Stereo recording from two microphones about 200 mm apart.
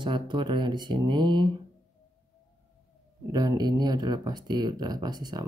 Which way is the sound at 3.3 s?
20° right (ahead or behind).